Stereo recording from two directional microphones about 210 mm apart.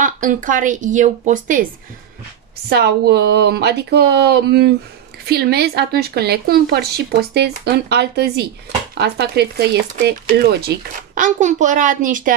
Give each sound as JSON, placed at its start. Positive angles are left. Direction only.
{"t": 0.0, "sound": "a woman's voice", "side_deg": -40}
{"t": 2.7, "sound": "speech", "side_deg": -50}
{"t": 11.1, "sound": "a woman's voice", "side_deg": -35}